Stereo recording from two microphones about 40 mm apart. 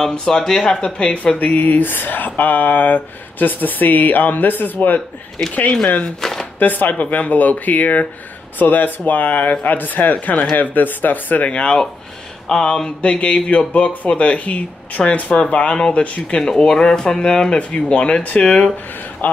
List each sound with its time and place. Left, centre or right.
0.1 s speech: centre
0.9 s speech: left
1.5 s speech: left
5.5 s speech: left
6.2 s a sound: centre
6.6 s speech: left
10.1 s speech: left
10.5 s speech: left
11.4 s speech: left
12.4 s speech: centre
16.3 s speech: centre
19.2 s a man's voice: left